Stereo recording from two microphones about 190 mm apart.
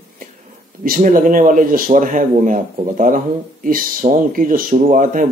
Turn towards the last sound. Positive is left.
turn(degrees=-45)  # may be behind; listen again after turning